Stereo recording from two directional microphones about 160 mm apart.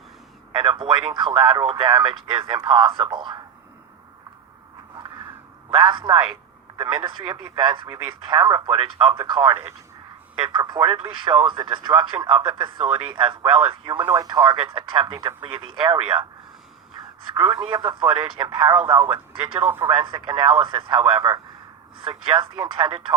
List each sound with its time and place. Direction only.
0.5 s speech: 25° right (ahead or behind)
5.7 s speech: 30° right (ahead or behind)
17.3 s speech: 30° right (ahead or behind)